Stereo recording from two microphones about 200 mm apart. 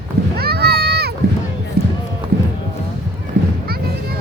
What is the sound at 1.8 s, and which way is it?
Run, 50° right (ahead or behind).